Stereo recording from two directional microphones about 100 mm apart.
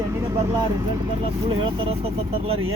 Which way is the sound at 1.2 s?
60° right (ahead or behind).